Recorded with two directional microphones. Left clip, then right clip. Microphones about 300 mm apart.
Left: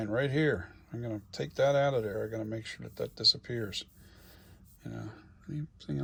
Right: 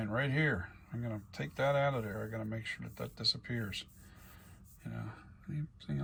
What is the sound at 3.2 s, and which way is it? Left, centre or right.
Speech, centre.